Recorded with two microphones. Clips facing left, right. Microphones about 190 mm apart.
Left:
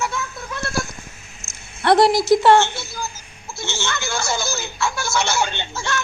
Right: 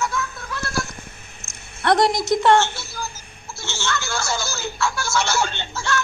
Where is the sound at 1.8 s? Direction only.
5° left (ahead or behind).